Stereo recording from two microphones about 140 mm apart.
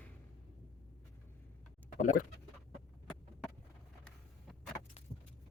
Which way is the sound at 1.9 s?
65° left (ahead or behind).